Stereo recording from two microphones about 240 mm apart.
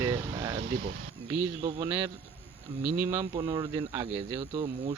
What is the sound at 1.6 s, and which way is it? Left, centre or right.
Speech, centre.